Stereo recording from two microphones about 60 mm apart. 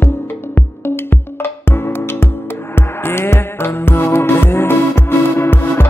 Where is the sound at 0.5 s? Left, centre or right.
Left.